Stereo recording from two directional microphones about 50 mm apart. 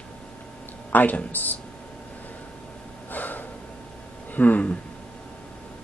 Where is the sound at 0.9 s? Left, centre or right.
Left.